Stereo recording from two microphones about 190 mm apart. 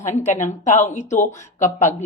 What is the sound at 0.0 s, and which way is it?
Speech, 40° left (ahead or behind).